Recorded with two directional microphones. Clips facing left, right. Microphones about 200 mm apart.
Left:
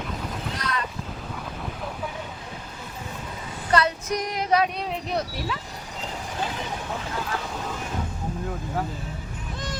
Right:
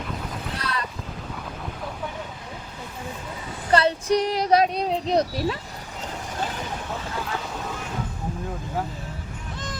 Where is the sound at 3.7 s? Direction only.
30° right (ahead or behind).